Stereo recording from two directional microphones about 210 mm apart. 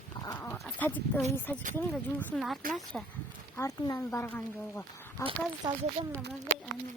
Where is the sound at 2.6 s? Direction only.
40° right (ahead or behind).